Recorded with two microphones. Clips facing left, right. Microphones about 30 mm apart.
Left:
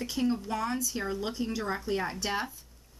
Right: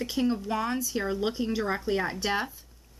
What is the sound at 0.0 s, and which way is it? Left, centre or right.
Speech, centre.